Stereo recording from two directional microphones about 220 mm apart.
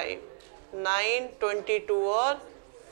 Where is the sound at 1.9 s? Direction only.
30° right (ahead or behind).